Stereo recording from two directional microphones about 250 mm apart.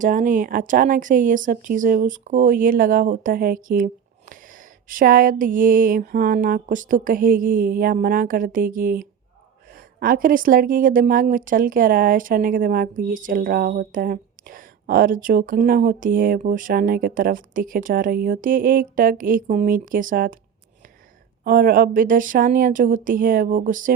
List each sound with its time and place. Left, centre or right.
0.0 s a woman's voice: right
21.4 s a woman's voice: right